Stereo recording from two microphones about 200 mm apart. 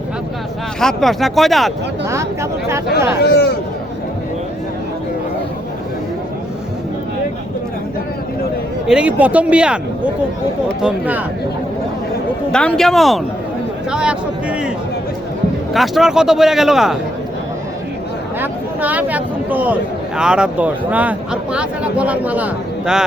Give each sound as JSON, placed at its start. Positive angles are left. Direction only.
{"t": 0.8, "sound": "speech", "side_deg": 0}
{"t": 2.0, "sound": "speech", "side_deg": -15}
{"t": 3.2, "sound": "speech", "side_deg": 55}
{"t": 8.9, "sound": "speech", "side_deg": -5}
{"t": 12.5, "sound": "speech", "side_deg": 5}
{"t": 15.7, "sound": "speech", "side_deg": 0}
{"t": 18.3, "sound": "speech", "side_deg": -10}